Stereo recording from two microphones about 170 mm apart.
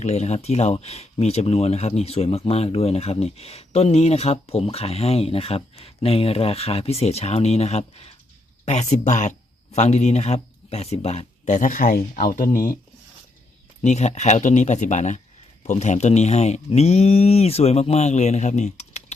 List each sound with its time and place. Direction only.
0.0 s speech: 40° left (ahead or behind)
13.8 s speech: 40° left (ahead or behind)